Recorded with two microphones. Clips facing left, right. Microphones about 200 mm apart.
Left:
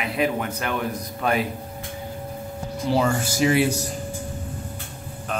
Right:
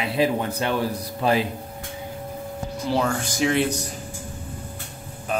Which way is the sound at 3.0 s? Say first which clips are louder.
Left 2 dB; 5° left (ahead or behind).